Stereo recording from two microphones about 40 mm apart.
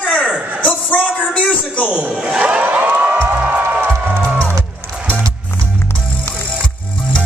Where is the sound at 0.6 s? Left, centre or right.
Left.